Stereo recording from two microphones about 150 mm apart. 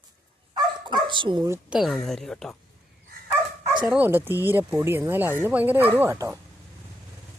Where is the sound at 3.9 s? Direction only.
10° right (ahead or behind).